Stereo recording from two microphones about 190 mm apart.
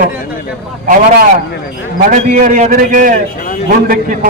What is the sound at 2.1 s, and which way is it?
A man's voice, 45° right (ahead or behind).